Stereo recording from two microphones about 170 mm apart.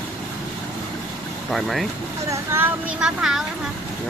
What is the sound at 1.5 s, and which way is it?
Speech, centre (ahead or behind).